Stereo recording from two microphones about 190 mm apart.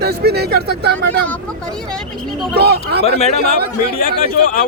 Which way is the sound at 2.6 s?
55° right (ahead or behind).